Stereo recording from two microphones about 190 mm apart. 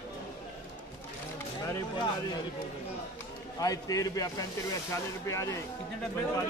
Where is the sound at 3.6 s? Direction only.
20° left (ahead or behind).